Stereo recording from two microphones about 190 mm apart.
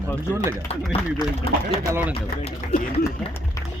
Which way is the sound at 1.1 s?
30° left (ahead or behind).